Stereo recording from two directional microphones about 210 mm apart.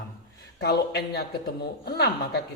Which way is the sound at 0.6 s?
50° left (ahead or behind).